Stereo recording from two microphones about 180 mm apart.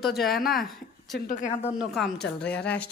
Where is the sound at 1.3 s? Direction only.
45° left (ahead or behind).